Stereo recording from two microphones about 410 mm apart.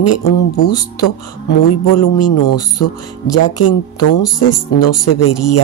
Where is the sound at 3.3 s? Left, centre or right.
Left.